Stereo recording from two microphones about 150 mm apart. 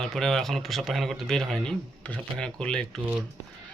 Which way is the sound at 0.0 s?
Centre (ahead or behind).